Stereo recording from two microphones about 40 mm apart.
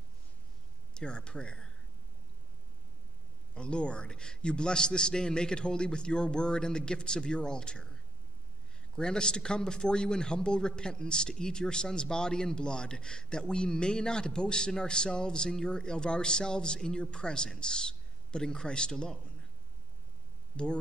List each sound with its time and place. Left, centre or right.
0.9 s speech: left
3.5 s speech: left
20.5 s speech: left